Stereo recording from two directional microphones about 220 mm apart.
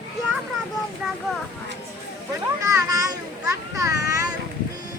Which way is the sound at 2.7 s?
15° right (ahead or behind).